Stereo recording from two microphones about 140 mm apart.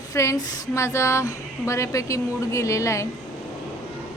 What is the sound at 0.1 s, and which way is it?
A woman's voice, 20° left (ahead or behind).